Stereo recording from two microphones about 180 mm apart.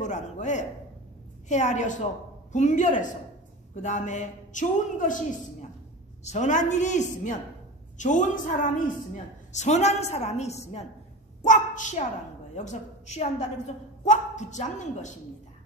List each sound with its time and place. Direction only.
0.0 s a man's voice: 40° left (ahead or behind)